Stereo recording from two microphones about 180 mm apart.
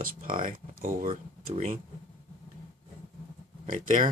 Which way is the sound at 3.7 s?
45° right (ahead or behind).